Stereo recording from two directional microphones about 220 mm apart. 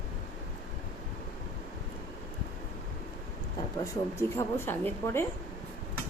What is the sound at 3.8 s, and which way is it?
A woman's voice, 15° left (ahead or behind).